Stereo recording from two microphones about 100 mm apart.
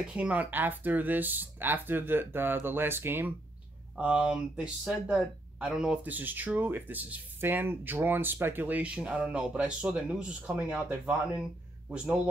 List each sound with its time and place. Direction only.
0.1 s speech: 15° right (ahead or behind)
3.9 s speech: 10° right (ahead or behind)